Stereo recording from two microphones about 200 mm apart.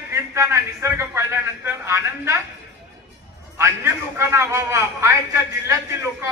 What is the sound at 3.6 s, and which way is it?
A man's voice, 15° right (ahead or behind).